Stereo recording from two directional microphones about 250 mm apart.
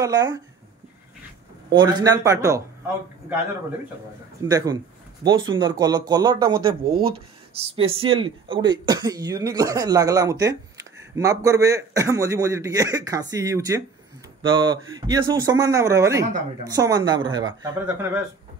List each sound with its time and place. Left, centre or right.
0.0 s speech: centre
1.7 s speech: centre
4.5 s speech: centre
6.8 s speech: right
7.1 s speech: right